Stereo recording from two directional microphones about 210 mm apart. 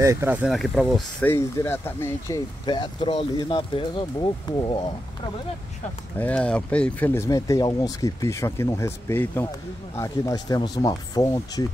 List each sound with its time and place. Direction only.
0.0 s speech: 15° right (ahead or behind)
0.5 s speech: centre (ahead or behind)
1.3 s speech: 10° left (ahead or behind)
6.1 s speech: 5° left (ahead or behind)